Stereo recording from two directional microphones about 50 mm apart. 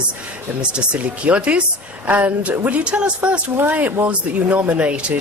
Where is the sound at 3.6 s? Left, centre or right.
Right.